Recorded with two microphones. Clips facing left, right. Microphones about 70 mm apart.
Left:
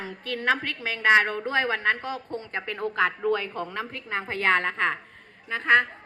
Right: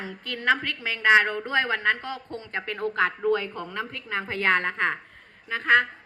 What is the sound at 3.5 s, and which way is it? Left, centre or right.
Speech, left.